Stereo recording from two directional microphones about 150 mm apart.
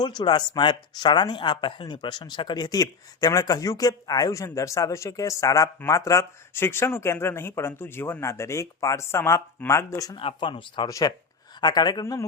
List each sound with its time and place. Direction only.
0.0 s speech: 30° left (ahead or behind)
10.2 s speech: 35° left (ahead or behind)